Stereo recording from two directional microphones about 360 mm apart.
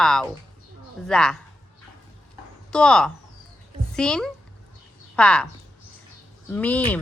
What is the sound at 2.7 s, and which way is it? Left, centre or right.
Speech, centre.